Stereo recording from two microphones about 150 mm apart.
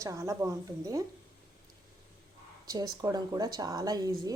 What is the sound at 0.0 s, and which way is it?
A woman's voice, 20° right (ahead or behind).